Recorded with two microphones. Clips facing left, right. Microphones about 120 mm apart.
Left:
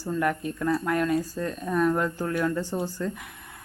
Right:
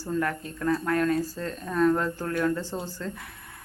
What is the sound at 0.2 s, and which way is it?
Speech, 15° left (ahead or behind).